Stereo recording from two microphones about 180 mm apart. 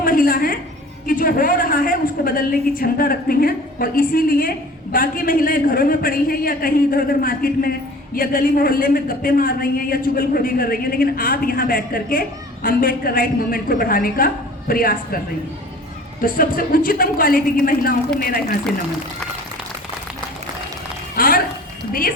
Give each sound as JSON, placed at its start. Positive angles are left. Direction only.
{"t": 0.0, "sound": "a sound", "side_deg": 50}
{"t": 1.0, "sound": "a woman's voice", "side_deg": 50}
{"t": 16.2, "sound": "a woman's voice", "side_deg": 50}
{"t": 21.2, "sound": "dog", "side_deg": 55}